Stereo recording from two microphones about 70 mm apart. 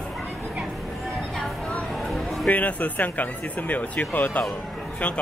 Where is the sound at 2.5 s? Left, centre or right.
Left.